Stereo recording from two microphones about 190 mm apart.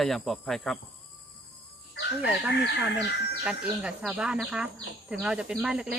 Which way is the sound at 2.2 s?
5° right (ahead or behind).